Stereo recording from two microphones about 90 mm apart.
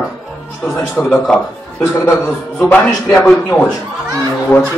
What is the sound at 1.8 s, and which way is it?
A man's voice, 30° left (ahead or behind).